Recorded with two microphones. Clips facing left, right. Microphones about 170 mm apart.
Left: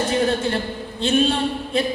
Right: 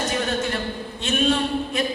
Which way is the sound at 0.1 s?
30° left (ahead or behind).